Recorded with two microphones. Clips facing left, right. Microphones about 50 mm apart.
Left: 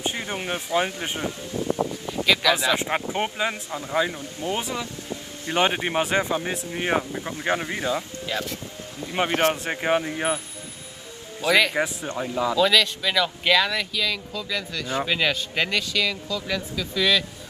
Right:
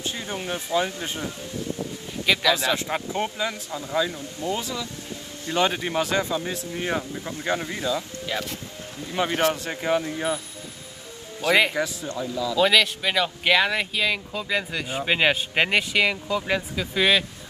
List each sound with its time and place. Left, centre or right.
0.0 s speech: left
2.2 s speech: centre
2.5 s speech: left
9.0 s speech: left
11.4 s speech: right
11.7 s speech: left
12.5 s speech: right
13.7 s speech: right